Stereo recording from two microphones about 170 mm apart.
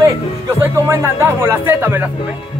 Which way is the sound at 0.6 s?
15° right (ahead or behind).